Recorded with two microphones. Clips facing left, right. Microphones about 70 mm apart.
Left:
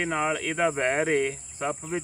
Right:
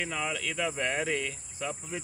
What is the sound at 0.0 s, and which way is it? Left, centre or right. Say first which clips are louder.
Cricket: left 6 dB; left.